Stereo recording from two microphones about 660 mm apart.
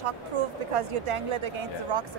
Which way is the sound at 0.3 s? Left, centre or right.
Right.